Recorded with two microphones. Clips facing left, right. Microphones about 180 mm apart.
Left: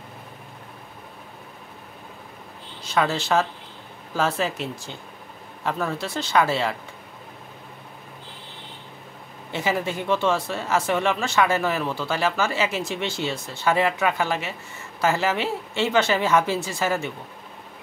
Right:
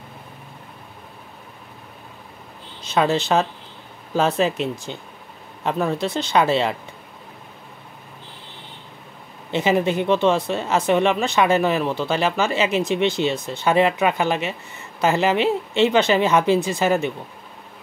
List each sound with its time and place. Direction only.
2.8 s speech: 20° right (ahead or behind)
9.5 s speech: 20° right (ahead or behind)